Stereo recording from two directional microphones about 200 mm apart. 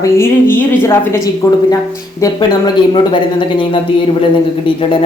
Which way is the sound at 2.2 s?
20° left (ahead or behind).